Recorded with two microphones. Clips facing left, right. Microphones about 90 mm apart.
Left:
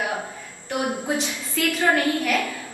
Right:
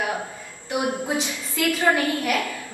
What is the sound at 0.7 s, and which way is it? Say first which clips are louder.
A woman's voice: even; 15° right (ahead or behind).